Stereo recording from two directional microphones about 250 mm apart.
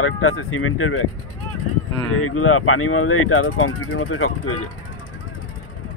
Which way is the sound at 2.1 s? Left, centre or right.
Left.